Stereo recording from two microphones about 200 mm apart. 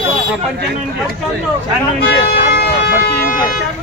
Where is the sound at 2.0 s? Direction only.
50° left (ahead or behind).